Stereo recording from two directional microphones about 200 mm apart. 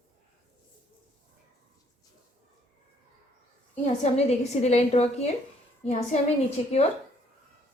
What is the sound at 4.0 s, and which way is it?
A woman's voice, 35° left (ahead or behind).